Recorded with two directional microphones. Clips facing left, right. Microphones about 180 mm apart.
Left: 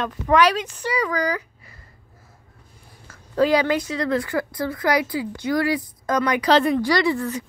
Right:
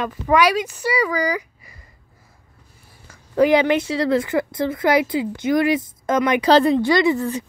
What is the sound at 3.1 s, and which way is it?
Speech, 15° right (ahead or behind).